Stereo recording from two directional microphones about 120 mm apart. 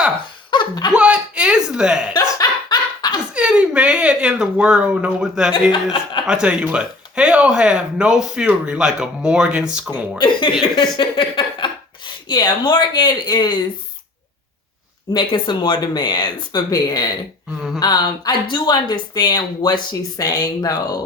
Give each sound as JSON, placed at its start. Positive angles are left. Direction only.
{"t": 0.5, "sound": "laughter", "side_deg": 40}
{"t": 0.9, "sound": "a sound", "side_deg": -10}
{"t": 2.4, "sound": "dog", "side_deg": 35}
{"t": 3.3, "sound": "speech", "side_deg": -10}
{"t": 5.7, "sound": "speech", "side_deg": 45}
{"t": 6.2, "sound": "speech", "side_deg": -10}
{"t": 10.2, "sound": "speech", "side_deg": 40}
{"t": 15.1, "sound": "speech", "side_deg": 40}